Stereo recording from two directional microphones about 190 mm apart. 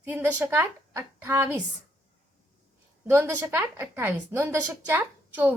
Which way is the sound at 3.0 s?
10° right (ahead or behind).